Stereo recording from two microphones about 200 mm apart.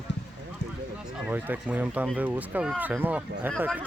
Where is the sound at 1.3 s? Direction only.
10° right (ahead or behind).